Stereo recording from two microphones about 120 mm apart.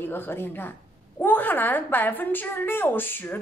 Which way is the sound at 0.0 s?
15° left (ahead or behind).